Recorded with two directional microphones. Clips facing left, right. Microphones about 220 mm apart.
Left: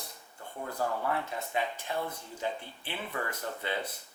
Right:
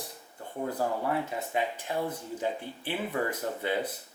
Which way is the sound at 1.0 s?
10° right (ahead or behind).